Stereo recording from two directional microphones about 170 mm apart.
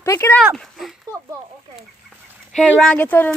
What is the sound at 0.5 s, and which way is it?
Speech, centre (ahead or behind).